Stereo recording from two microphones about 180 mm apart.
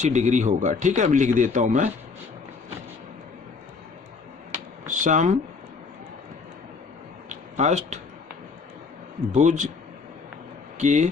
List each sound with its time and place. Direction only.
0.0 s speech: 40° right (ahead or behind)
4.9 s speech: 45° right (ahead or behind)
7.3 s a sound: 40° right (ahead or behind)
9.3 s speech: 40° right (ahead or behind)
10.8 s a man's voice: 40° right (ahead or behind)